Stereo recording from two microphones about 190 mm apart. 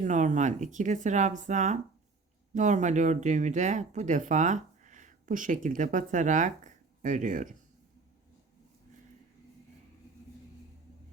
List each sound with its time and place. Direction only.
0.0 s speech: 40° right (ahead or behind)